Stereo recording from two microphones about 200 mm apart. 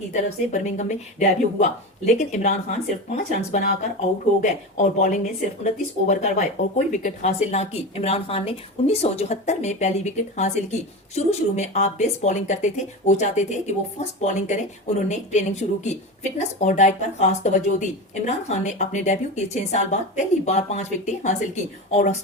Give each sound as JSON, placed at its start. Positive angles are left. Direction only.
{"t": 0.1, "sound": "speech", "side_deg": 35}